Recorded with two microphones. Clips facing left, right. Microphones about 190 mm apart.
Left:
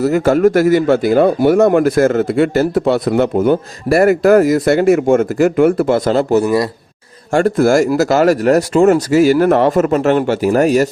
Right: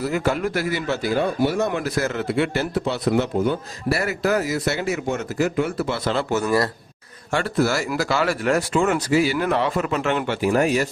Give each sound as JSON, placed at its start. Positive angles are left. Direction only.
{"t": 0.0, "sound": "a man's voice", "side_deg": 45}
{"t": 6.4, "sound": "speech", "side_deg": 20}
{"t": 7.3, "sound": "a man's voice", "side_deg": 50}